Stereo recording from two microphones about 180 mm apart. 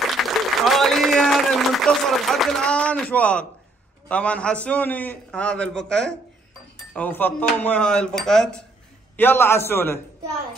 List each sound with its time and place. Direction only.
0.2 s applause: centre (ahead or behind)
4.1 s a man's voice: 5° left (ahead or behind)